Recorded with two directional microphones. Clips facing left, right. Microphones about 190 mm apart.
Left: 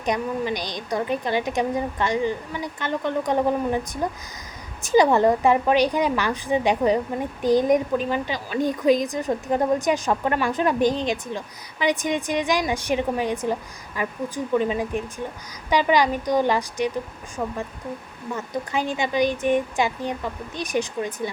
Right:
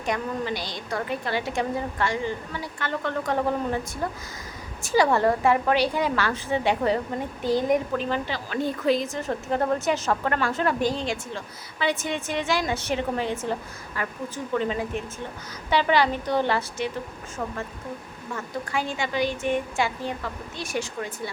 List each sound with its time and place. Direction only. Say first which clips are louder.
0.0 s a woman's voice: left 3 dB; 20° left (ahead or behind)
18.3 s a woman's voice: left 3 dB; 20° left (ahead or behind)